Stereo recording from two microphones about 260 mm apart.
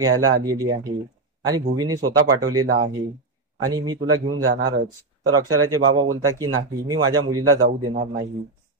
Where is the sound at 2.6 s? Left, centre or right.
Right.